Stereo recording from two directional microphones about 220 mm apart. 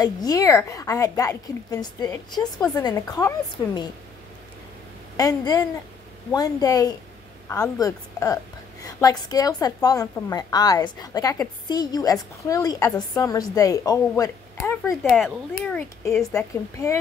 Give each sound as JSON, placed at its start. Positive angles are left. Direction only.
{"t": 0.0, "sound": "a woman's voice", "side_deg": 15}
{"t": 5.1, "sound": "a woman's voice", "side_deg": 15}
{"t": 7.4, "sound": "a woman's voice", "side_deg": 5}
{"t": 15.0, "sound": "speech", "side_deg": 0}
{"t": 16.7, "sound": "a woman's voice", "side_deg": 15}